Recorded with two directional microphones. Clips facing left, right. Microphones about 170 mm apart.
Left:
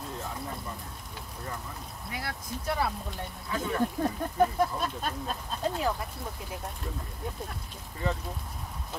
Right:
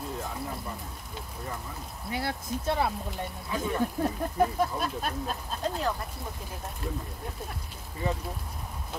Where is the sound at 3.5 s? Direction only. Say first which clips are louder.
Even; 10° right (ahead or behind).